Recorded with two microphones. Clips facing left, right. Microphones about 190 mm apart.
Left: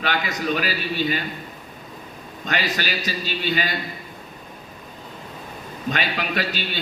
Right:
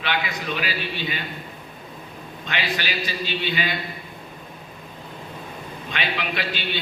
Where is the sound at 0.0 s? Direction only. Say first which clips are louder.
Left 3 dB; 45° left (ahead or behind).